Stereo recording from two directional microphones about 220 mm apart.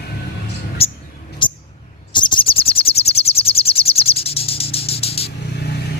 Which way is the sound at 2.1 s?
20° left (ahead or behind).